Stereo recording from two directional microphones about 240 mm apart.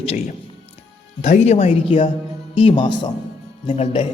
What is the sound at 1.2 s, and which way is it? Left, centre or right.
A man's voice, left.